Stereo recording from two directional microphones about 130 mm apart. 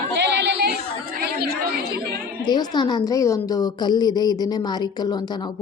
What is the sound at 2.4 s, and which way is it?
A woman's voice, 35° left (ahead or behind).